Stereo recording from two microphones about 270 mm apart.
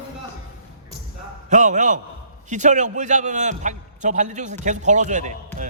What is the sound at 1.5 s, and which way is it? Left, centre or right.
A man's voice, right.